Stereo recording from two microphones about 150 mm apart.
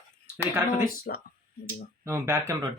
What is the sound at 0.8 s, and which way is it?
Speech, 80° left.